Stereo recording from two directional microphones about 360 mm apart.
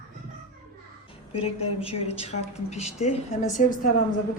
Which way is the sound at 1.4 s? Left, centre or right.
Centre.